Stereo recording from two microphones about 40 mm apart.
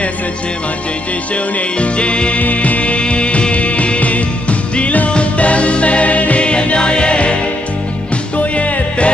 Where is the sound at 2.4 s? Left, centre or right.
Left.